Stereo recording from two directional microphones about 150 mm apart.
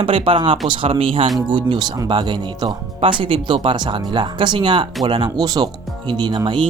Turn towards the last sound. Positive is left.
turn(degrees=-30)  # may be behind; listen again after turning